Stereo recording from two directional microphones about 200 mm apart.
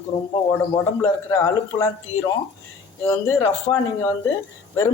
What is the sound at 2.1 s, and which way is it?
Speech, 90° left.